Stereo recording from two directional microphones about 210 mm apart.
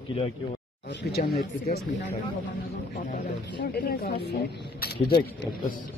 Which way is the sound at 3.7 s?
45° left (ahead or behind).